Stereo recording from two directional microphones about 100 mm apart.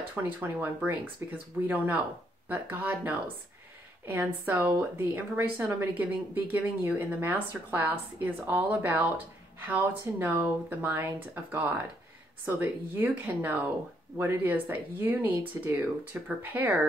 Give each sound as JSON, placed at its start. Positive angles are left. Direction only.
{"t": 0.1, "sound": "a woman's voice", "side_deg": -20}